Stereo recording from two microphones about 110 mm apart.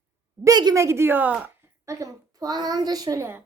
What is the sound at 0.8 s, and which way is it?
Speech, 25° right (ahead or behind).